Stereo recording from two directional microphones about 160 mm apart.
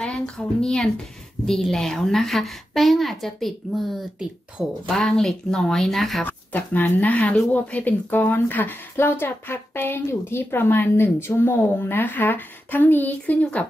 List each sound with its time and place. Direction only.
0.0 s speech: 5° left (ahead or behind)
6.2 s speech: 10° left (ahead or behind)